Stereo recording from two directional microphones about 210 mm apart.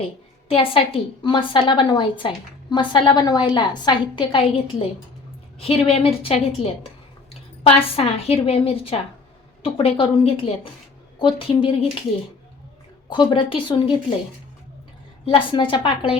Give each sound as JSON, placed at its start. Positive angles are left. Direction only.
{"t": 0.4, "sound": "a woman's voice", "side_deg": 25}
{"t": 13.1, "sound": "a woman's voice", "side_deg": 25}
{"t": 15.3, "sound": "a woman's voice", "side_deg": 25}